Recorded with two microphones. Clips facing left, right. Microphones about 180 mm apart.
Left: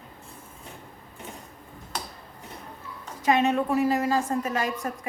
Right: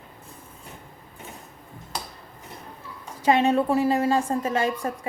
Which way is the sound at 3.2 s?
30° right (ahead or behind).